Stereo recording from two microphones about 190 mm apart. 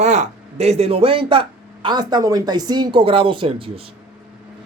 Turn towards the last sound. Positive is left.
turn(degrees=-30)  # may be behind; listen again after turning